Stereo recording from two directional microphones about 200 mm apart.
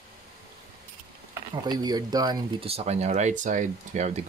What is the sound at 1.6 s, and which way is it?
Speech, 20° right (ahead or behind).